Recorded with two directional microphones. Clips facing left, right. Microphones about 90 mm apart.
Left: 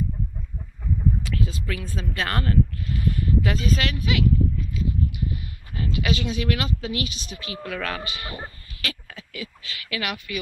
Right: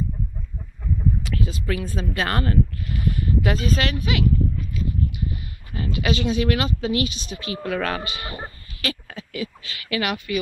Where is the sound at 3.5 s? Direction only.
45° right (ahead or behind).